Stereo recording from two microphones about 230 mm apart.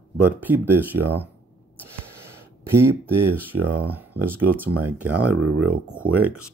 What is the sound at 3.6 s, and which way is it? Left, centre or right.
Speech, right.